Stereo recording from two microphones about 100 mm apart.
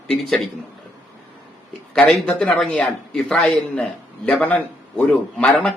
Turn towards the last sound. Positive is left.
turn(degrees=10)  # may be behind; listen again after turning